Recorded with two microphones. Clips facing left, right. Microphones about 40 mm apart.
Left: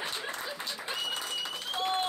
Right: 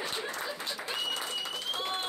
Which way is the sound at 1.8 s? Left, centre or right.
Centre.